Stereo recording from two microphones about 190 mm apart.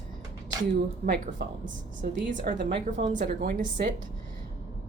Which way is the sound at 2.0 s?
45° right (ahead or behind).